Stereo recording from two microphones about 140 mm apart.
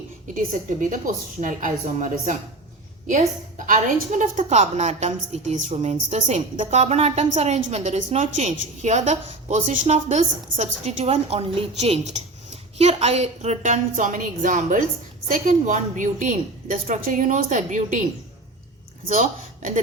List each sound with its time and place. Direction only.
0.3 s a woman's voice: 65° right (ahead or behind)
3.7 s a woman's voice: 65° right (ahead or behind)
19.0 s speech: 70° right (ahead or behind)